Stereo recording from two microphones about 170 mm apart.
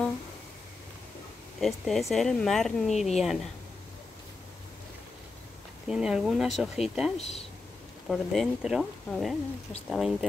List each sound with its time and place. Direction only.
1.6 s speech: centre (ahead or behind)
5.9 s speech: 5° right (ahead or behind)
7.2 s speech: 35° left (ahead or behind)
8.1 s speech: centre (ahead or behind)